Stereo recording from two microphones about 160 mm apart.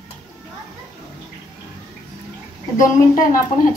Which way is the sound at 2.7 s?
55° left (ahead or behind).